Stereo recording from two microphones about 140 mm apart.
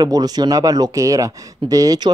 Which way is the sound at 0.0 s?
30° right (ahead or behind).